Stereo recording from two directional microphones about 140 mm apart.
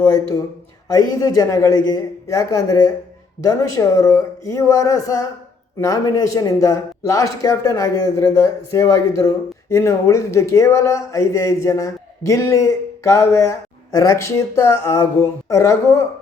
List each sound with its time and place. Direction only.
0.0 s speech: 20° left (ahead or behind)